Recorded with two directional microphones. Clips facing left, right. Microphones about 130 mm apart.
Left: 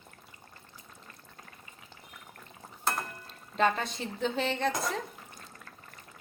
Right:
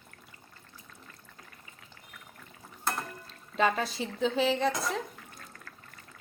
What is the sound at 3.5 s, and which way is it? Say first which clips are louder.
Speech: even; centre (ahead or behind).